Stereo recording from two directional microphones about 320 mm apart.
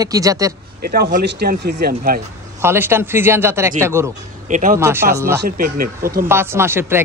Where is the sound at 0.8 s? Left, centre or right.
Right.